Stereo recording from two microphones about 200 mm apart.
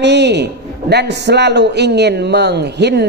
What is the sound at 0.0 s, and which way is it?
A woman's voice, 60° right (ahead or behind).